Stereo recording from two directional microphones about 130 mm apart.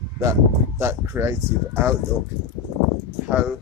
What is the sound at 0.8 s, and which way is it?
Speech, 20° right (ahead or behind).